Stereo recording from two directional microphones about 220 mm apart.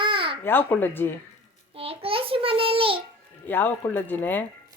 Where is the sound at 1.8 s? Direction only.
25° right (ahead or behind).